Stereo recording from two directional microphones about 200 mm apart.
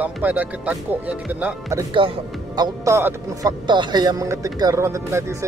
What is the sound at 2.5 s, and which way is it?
Speech, 20° right (ahead or behind).